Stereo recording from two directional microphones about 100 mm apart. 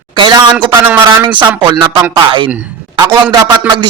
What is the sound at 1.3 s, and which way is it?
A man's voice, 55° right (ahead or behind).